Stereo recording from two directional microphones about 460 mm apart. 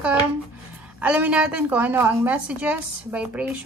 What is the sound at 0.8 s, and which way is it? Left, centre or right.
Speech, centre.